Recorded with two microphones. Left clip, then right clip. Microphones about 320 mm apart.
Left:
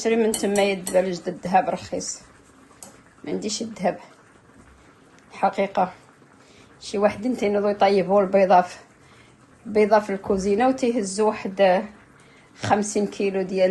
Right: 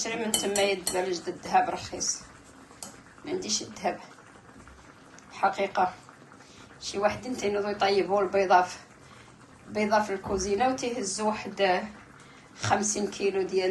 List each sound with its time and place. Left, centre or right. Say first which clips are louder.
0.0 s cutlery: left 9 dB; left
3.2 s cutlery: left 3 dB; left
5.3 s speech: left 4 dB; left
6.8 s cutlery: left 6 dB; left